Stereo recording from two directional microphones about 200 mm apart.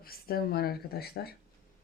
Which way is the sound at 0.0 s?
50° left (ahead or behind).